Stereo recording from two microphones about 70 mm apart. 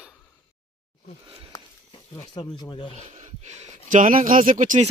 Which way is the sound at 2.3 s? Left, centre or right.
Left.